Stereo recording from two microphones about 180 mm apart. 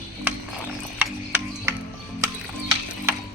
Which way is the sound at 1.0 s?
10° right (ahead or behind).